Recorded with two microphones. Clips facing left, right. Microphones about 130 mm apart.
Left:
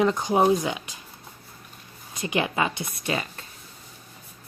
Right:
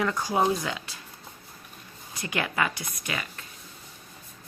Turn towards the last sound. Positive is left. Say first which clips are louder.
# left 6 dB
turn(degrees=30)  # may be behind; listen again after turning